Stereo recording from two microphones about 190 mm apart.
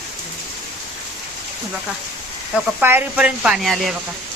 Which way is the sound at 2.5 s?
10° right (ahead or behind).